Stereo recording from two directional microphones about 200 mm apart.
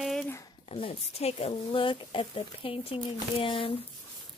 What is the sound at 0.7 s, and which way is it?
Speech, 30° left (ahead or behind).